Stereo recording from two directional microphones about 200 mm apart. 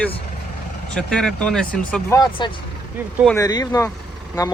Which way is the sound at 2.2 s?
25° left (ahead or behind).